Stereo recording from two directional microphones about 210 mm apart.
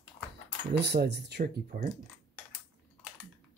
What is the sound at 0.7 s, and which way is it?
Speech, 55° right (ahead or behind).